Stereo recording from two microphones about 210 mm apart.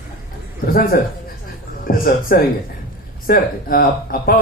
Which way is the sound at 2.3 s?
45° left (ahead or behind).